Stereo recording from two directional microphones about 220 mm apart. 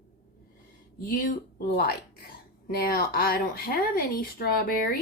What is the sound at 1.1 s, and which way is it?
Speech, 40° left (ahead or behind).